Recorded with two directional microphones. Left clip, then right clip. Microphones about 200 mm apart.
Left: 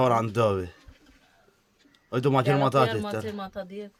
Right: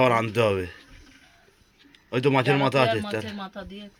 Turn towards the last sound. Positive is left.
turn(degrees=20)  # may be behind; listen again after turning